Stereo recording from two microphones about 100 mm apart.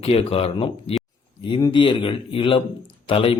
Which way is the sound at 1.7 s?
55° left (ahead or behind).